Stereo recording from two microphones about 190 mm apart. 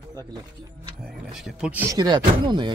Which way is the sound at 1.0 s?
Centre (ahead or behind).